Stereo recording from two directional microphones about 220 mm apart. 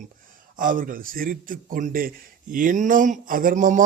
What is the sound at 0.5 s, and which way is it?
A man's voice, 40° right (ahead or behind).